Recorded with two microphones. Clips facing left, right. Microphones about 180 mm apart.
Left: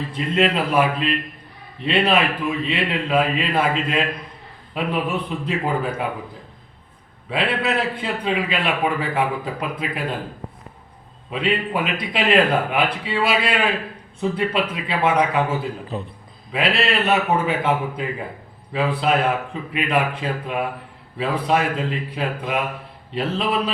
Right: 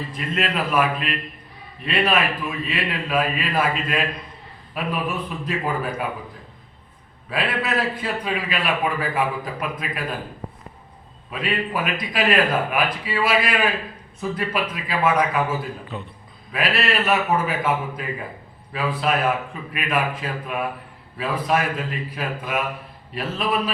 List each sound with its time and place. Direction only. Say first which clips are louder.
0.1 s speech: left 7 dB; 25° left (ahead or behind)
5.1 s speech: left 3 dB; 25° left (ahead or behind)
7.3 s speech: left 3 dB; 25° left (ahead or behind)
11.3 s a man's voice: left 3 dB; 25° left (ahead or behind)